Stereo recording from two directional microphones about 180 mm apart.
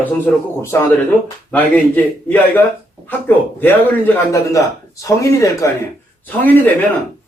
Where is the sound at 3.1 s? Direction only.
10° left (ahead or behind).